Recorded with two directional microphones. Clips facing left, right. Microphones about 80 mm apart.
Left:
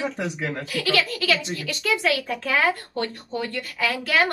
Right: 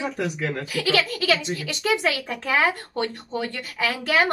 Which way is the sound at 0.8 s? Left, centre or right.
Right.